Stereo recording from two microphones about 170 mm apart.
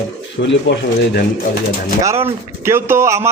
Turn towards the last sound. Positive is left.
turn(degrees=-15)  # may be behind; listen again after turning